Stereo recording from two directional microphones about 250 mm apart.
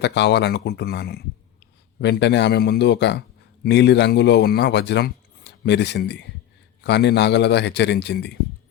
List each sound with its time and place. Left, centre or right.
0.0 s a man's voice: left